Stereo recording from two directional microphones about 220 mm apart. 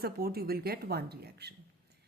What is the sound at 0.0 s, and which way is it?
A woman's voice, 45° right (ahead or behind).